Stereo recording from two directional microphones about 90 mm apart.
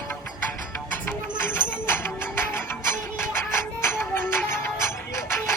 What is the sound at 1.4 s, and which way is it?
Music, 25° left (ahead or behind).